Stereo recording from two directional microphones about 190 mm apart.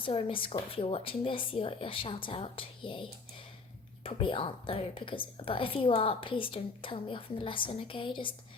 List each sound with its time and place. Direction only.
0.0 s a woman's voice: 30° left (ahead or behind)